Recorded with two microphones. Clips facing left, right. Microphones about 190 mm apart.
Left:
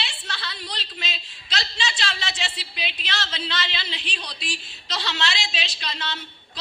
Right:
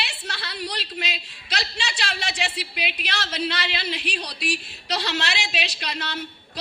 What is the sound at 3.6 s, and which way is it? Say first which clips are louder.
Speech: right 5 dB; 60° right (ahead or behind).